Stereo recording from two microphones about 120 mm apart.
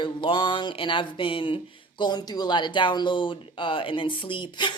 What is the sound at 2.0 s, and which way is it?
Speech, 35° left (ahead or behind).